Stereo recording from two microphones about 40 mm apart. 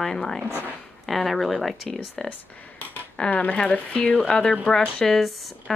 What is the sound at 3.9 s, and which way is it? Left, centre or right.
Speech, left.